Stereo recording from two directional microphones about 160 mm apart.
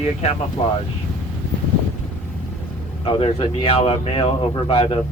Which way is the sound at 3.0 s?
35° left (ahead or behind).